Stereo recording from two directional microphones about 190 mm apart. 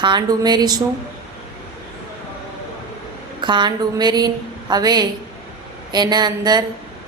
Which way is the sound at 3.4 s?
25° right (ahead or behind).